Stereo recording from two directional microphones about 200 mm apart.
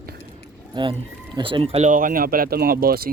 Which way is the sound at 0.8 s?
25° right (ahead or behind).